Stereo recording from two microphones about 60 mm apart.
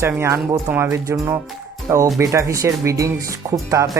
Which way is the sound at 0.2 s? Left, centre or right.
Right.